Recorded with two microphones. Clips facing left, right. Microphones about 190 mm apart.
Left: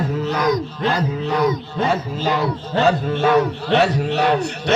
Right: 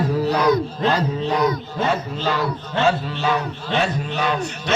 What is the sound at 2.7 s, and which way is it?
Speech, 45° left (ahead or behind).